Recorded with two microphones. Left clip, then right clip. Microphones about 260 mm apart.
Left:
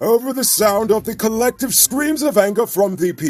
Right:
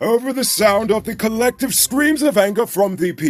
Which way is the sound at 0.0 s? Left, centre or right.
Right.